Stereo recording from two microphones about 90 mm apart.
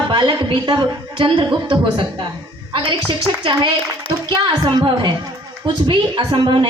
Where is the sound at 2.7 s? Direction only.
75° right (ahead or behind).